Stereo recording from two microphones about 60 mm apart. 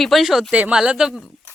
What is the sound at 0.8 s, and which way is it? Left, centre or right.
Speech, centre.